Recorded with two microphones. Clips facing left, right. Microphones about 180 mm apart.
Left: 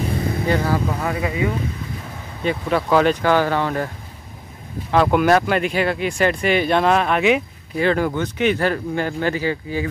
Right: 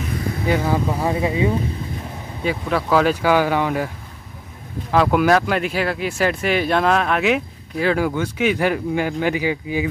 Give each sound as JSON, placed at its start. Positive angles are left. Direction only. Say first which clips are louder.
{"t": 0.5, "sound": "speech", "louder": "right 2 dB", "side_deg": -15}
{"t": 2.4, "sound": "speech", "louder": "left 1 dB", "side_deg": -5}
{"t": 4.9, "sound": "speech", "louder": "even", "side_deg": 0}